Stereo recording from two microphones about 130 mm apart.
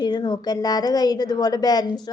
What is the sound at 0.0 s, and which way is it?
A woman's voice, 35° left (ahead or behind).